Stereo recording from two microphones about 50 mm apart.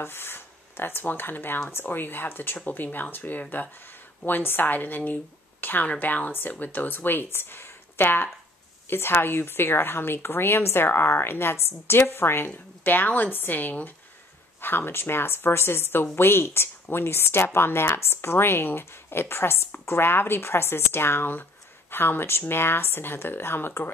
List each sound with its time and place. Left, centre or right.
0.0 s a woman's voice: left
12.4 s a woman's voice: left